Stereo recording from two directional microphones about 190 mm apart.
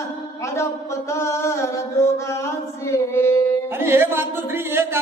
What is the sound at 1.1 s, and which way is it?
A man's voice, 15° left (ahead or behind).